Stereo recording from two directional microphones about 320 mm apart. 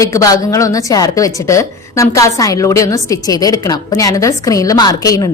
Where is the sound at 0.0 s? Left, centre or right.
Centre.